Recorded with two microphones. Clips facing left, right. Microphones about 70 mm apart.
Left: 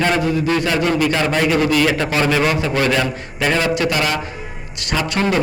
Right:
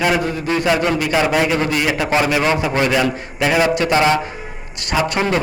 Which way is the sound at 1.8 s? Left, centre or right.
Centre.